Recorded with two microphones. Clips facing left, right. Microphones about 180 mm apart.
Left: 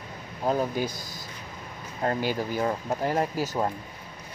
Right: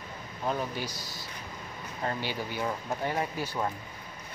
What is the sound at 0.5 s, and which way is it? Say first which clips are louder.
Speech: left 6 dB; 35° left (ahead or behind).